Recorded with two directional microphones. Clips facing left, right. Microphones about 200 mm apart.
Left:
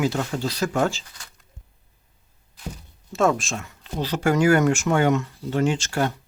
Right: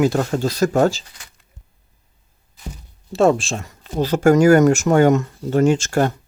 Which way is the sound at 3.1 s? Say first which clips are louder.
Right 5 dB; 30° right (ahead or behind).